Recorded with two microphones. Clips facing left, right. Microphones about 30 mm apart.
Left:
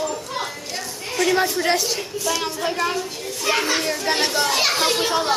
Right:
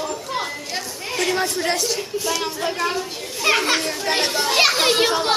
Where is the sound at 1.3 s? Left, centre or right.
Centre.